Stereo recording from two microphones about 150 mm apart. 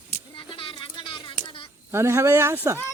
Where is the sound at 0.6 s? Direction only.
35° left (ahead or behind).